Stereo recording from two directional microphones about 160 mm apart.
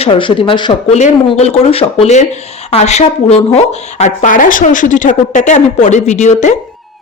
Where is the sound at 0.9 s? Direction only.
45° left (ahead or behind).